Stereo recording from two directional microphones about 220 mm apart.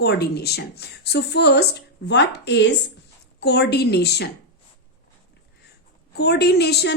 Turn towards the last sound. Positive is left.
turn(degrees=50)  # may be behind; listen again after turning